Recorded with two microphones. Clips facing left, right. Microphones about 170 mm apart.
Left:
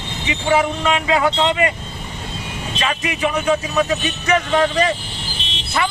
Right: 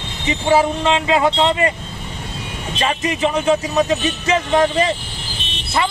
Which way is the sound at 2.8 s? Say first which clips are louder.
Right 3 dB; 30° right (ahead or behind).